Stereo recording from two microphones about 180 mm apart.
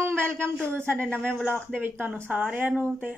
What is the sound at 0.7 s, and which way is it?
Speech, 10° right (ahead or behind).